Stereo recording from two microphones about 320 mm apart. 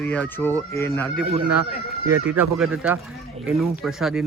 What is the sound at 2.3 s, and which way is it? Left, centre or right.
Speech, centre.